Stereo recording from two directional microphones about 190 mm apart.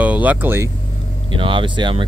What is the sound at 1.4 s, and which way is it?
Speech, 25° right (ahead or behind).